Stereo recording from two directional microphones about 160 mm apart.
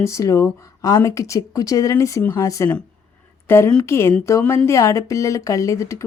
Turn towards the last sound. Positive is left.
turn(degrees=20)  # may be behind; listen again after turning